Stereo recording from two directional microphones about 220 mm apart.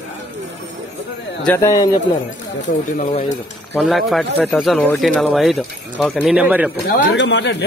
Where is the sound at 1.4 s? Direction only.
15° left (ahead or behind).